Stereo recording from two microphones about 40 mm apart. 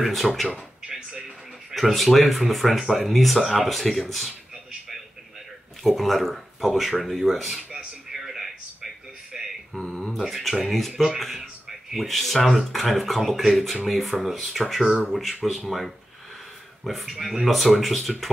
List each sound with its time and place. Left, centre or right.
0.0 s speech: centre
0.8 s a sound: centre
1.7 s speech: centre
5.9 s speech: centre
7.7 s a sound: centre
9.8 s speech: centre
11.1 s speech: centre
17.1 s speech: centre
17.5 s speech: centre